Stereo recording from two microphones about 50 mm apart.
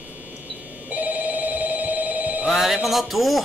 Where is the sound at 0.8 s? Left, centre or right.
Right.